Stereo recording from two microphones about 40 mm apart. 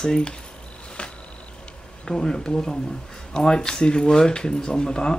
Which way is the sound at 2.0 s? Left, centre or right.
Centre.